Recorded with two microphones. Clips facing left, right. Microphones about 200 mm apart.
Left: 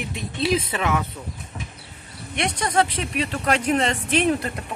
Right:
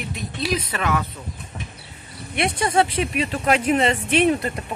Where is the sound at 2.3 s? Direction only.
5° right (ahead or behind).